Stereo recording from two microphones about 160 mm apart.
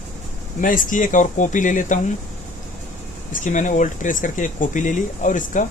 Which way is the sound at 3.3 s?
50° left (ahead or behind).